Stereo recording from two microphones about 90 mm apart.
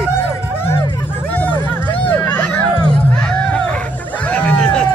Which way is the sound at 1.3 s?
20° left (ahead or behind).